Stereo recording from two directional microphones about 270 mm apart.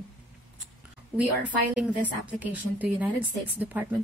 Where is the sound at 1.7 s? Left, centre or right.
Centre.